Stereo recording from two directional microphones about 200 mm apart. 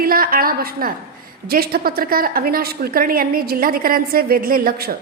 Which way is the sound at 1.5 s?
50° right (ahead or behind).